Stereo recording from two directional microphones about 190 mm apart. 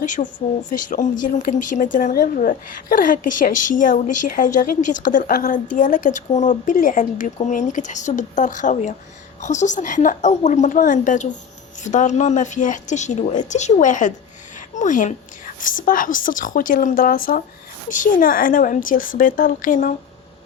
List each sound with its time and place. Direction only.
0.0 s a woman's voice: 40° left (ahead or behind)